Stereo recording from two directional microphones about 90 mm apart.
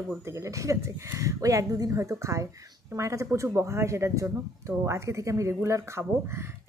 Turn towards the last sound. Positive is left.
turn(degrees=-30)  # may be behind; listen again after turning